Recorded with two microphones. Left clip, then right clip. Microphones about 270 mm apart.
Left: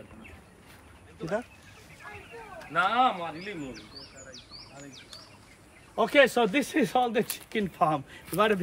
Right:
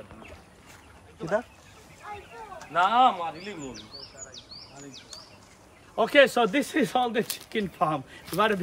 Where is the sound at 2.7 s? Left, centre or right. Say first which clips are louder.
Right 4 dB; centre.